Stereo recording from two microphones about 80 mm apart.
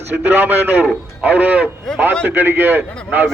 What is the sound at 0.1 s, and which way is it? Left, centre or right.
A man's voice, right.